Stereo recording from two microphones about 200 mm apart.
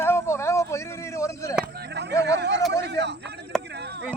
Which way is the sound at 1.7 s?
55° right (ahead or behind).